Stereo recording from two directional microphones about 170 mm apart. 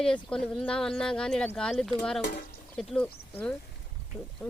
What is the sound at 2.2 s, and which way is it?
Stir, 55° left (ahead or behind).